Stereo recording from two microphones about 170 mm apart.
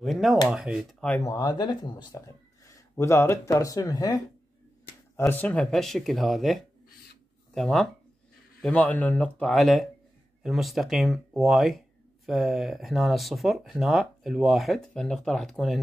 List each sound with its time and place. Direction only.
0.0 s speech: centre (ahead or behind)
1.2 s speech: 20° left (ahead or behind); by 15.8 s centre (ahead or behind)